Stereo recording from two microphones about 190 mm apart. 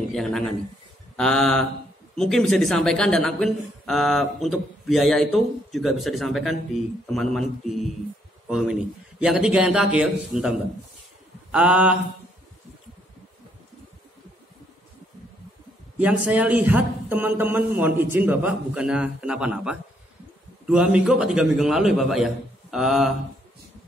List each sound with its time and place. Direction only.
0.1 s a man's voice: centre (ahead or behind)
16.0 s a man's voice: 5° right (ahead or behind)